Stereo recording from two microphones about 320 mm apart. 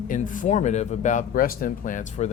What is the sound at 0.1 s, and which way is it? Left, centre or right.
Speech, left.